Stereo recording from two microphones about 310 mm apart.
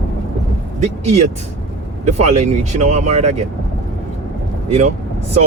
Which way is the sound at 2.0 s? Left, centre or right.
Right.